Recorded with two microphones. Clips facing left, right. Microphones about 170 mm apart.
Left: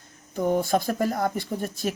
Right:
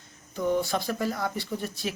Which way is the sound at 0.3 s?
45° left (ahead or behind).